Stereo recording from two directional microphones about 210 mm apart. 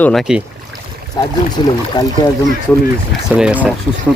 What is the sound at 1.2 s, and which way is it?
Speech, 20° left (ahead or behind).